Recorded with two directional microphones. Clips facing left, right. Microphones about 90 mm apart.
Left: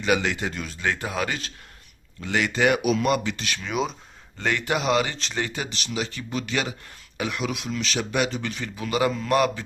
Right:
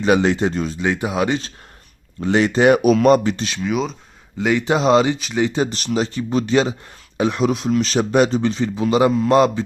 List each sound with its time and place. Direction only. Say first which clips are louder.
0.0 s speech: right 8 dB; 30° right (ahead or behind)
3.4 s speech: right 7 dB; 20° right (ahead or behind)
3.7 s speech: right 5 dB; centre (ahead or behind)
4.4 s a man's voice: right 7 dB; 10° right (ahead or behind)
4.6 s speech: right 8 dB; 25° right (ahead or behind)
5.0 s speech: right 10 dB; 10° right (ahead or behind)
5.6 s speech: right 9 dB; 40° right (ahead or behind); by 9.6 s 25° right (ahead or behind)